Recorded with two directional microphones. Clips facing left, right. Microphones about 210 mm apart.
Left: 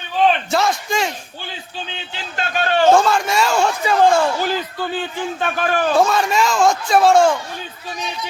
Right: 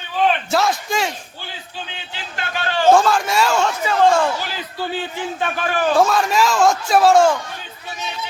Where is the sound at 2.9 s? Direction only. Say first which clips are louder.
Even; centre (ahead or behind).